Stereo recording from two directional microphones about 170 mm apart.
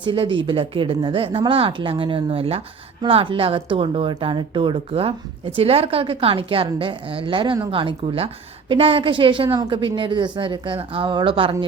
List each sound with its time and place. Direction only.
0.0 s a woman's voice: 30° right (ahead or behind)